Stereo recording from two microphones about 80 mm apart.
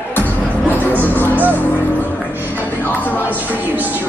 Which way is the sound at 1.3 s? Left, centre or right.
Right.